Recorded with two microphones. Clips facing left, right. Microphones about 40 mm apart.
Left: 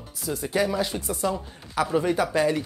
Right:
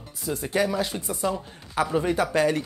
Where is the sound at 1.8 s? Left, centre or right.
Right.